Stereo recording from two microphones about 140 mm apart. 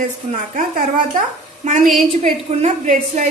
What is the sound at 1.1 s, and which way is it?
A child's voice, 60° right (ahead or behind).